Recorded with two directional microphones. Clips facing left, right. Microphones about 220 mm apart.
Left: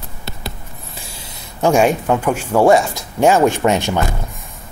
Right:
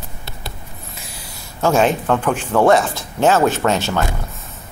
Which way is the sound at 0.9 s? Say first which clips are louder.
Left 1 dB; 25° left (ahead or behind).